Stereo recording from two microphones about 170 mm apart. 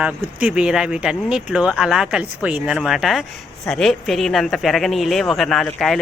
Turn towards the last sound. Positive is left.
turn(degrees=0)  # may be behind; listen again after turning